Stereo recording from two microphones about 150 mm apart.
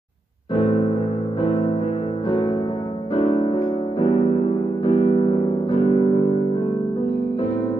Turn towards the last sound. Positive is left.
turn(degrees=40)  # may be behind; listen again after turning